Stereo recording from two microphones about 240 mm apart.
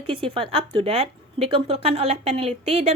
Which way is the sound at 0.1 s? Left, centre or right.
Right.